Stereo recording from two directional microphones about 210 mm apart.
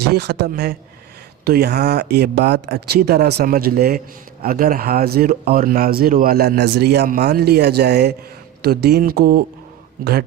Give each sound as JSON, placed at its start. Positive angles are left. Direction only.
{"t": 0.0, "sound": "speech", "side_deg": -50}